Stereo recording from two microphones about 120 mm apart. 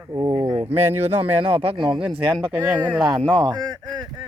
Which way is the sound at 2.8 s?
35° right (ahead or behind).